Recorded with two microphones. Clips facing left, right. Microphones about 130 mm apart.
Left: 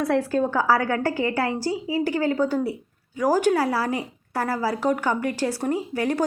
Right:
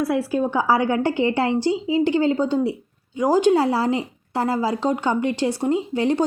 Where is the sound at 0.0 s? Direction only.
10° right (ahead or behind).